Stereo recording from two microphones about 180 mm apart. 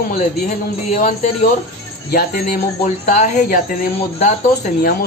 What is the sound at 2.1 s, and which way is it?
Speech, 60° left (ahead or behind).